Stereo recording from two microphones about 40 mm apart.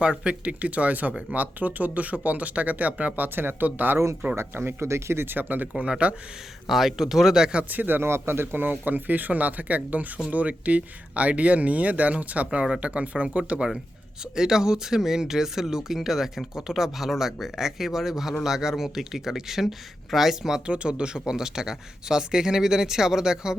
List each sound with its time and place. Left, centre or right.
0.0 s speech: right
4.4 s speech: right
5.1 s speech: right
5.7 s speech: right
6.7 s speech: centre
7.7 s speech: right
8.0 s speech: right
14.3 s speech: centre
20.7 s speech: right